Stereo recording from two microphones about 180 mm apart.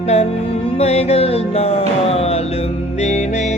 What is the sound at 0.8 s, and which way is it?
Music, 35° left (ahead or behind).